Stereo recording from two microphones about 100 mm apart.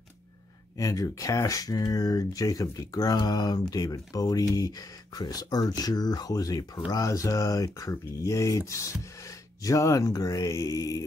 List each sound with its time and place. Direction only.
0.7 s speech: 35° left (ahead or behind)